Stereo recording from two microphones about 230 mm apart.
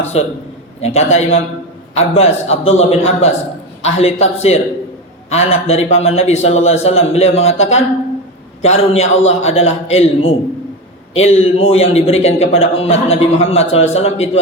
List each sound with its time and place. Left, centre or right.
0.0 s a man's voice: left